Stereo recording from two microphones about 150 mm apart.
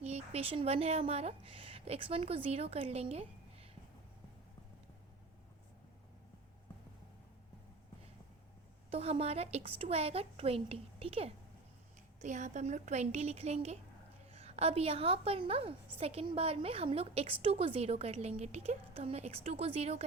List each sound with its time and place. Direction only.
0.0 s speech: 45° right (ahead or behind)
8.9 s a woman's voice: 40° right (ahead or behind)
12.2 s a woman's voice: 50° right (ahead or behind)